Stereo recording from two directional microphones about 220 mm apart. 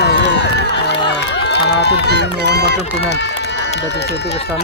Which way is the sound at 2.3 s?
50° right (ahead or behind).